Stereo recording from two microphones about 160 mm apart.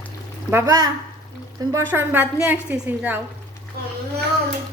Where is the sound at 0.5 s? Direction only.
20° right (ahead or behind).